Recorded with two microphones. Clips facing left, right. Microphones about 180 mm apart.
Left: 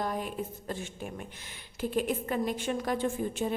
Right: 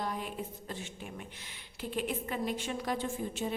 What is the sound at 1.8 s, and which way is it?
A woman's voice, 45° left (ahead or behind).